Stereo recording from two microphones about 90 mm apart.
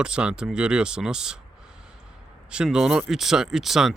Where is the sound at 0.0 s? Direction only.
10° right (ahead or behind).